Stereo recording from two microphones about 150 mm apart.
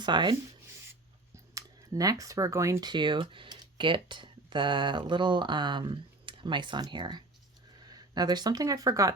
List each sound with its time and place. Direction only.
0.0 s speech: 30° right (ahead or behind)
1.5 s speech: 25° right (ahead or behind)
2.9 s speech: 30° right (ahead or behind)